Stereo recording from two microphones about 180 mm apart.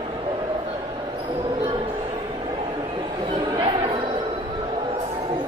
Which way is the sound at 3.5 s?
25° right (ahead or behind).